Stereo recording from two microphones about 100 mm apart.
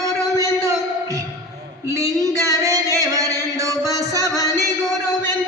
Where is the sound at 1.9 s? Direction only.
35° right (ahead or behind).